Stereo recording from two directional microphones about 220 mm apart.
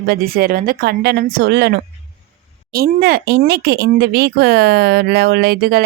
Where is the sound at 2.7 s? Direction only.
45° right (ahead or behind).